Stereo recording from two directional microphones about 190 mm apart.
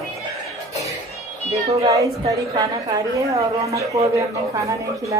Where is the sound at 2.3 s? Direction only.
20° right (ahead or behind).